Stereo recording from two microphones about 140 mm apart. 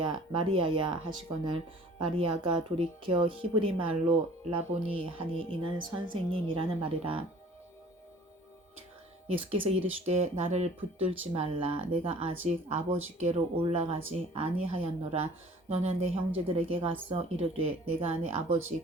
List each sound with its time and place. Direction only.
0.0 s speech: 35° right (ahead or behind)
2.0 s speech: 35° right (ahead or behind)
9.2 s speech: 45° right (ahead or behind)
11.3 s speech: 40° right (ahead or behind)